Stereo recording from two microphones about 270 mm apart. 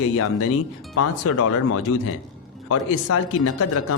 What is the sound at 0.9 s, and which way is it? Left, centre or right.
A man's voice, left.